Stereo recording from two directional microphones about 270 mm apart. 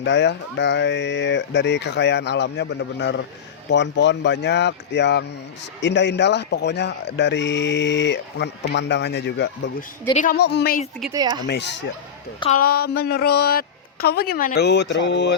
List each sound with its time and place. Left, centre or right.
0.0 s speech: left
11.1 s speech: centre
11.4 s speech: left
12.4 s speech: left